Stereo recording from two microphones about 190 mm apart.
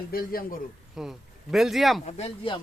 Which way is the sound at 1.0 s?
Centre (ahead or behind).